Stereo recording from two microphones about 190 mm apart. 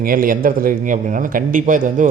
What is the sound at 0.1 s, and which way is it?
A man's voice, 50° right (ahead or behind).